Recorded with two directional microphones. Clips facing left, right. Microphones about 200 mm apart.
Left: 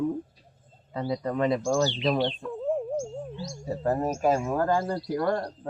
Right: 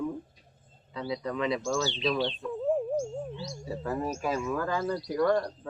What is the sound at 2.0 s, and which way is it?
Speech, 50° left (ahead or behind).